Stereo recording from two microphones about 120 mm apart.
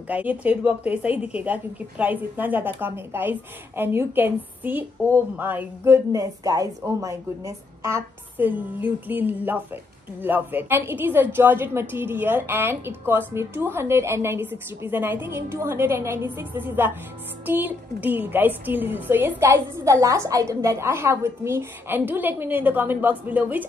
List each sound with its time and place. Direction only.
0.1 s a woman's voice: 10° right (ahead or behind)